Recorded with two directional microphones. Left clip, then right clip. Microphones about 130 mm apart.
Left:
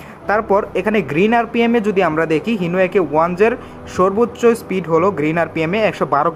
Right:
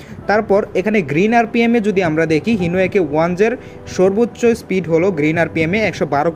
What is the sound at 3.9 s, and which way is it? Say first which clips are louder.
Speech: right 1 dB; 35° right (ahead or behind).